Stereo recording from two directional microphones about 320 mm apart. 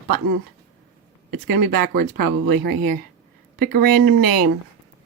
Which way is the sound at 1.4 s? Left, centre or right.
Right.